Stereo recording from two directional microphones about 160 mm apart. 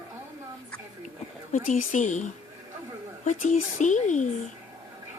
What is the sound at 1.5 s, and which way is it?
Speech, 55° left (ahead or behind).